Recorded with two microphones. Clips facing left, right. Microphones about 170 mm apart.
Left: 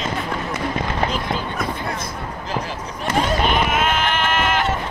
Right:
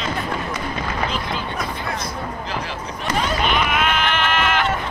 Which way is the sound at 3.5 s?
45° left (ahead or behind).